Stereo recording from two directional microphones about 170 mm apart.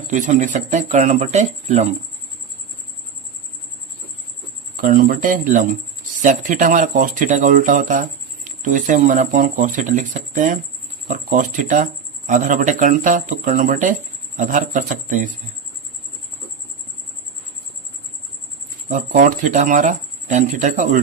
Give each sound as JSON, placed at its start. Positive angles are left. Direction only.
{"t": 0.1, "sound": "speech", "side_deg": -45}
{"t": 4.8, "sound": "speech", "side_deg": -55}
{"t": 18.9, "sound": "speech", "side_deg": -50}